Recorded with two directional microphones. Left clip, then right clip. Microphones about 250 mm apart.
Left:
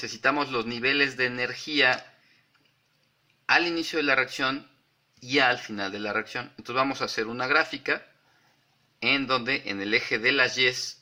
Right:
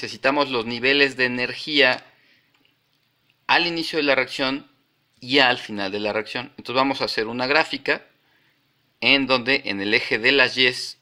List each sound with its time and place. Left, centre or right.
0.0 s speech: right
3.4 s speech: centre
9.0 s speech: right